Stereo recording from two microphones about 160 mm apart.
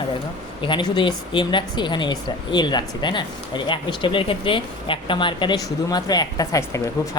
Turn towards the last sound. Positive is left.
turn(degrees=20)  # may be behind; listen again after turning